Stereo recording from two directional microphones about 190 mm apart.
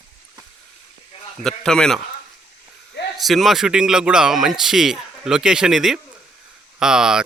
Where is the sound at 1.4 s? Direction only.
5° left (ahead or behind).